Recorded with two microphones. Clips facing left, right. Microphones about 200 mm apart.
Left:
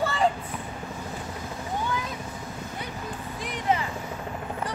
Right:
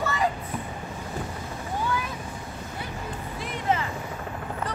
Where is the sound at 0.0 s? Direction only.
30° left (ahead or behind).